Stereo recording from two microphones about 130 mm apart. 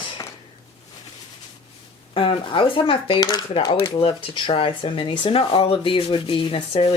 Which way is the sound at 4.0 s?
40° left (ahead or behind).